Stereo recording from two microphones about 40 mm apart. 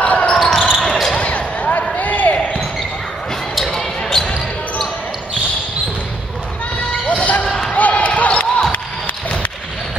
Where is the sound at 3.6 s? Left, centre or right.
Centre.